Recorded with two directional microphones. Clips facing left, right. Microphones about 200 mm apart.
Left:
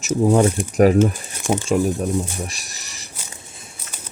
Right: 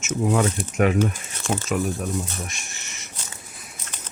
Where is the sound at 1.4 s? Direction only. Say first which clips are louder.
Left 5 dB; 15° left (ahead or behind).